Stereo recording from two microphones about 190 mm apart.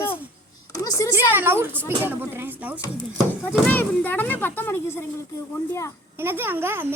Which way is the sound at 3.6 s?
10° left (ahead or behind).